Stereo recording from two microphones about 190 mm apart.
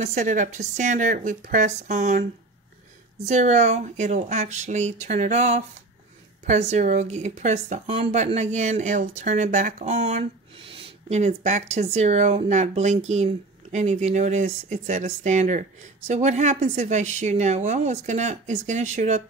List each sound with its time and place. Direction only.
0.0 s speech: 40° right (ahead or behind)
3.3 s speech: 40° right (ahead or behind)